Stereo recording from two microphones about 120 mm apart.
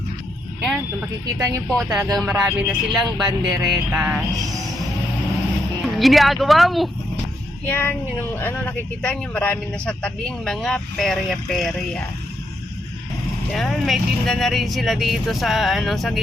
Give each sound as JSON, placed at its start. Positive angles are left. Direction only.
{"t": 1.4, "sound": "speech", "side_deg": -30}
{"t": 1.7, "sound": "speech", "side_deg": 0}
{"t": 5.8, "sound": "speech", "side_deg": 0}
{"t": 7.7, "sound": "speech", "side_deg": 15}
{"t": 13.5, "sound": "speech", "side_deg": 0}